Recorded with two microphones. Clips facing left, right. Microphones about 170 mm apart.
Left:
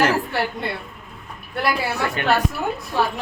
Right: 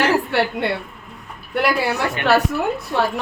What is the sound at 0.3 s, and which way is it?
Speech, 75° right (ahead or behind).